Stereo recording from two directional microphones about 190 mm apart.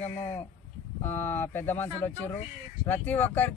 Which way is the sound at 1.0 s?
10° left (ahead or behind).